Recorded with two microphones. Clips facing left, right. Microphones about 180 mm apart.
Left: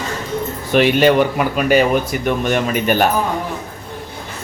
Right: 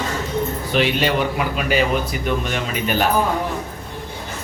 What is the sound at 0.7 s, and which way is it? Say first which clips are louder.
Speech: left 7 dB; 50° left (ahead or behind).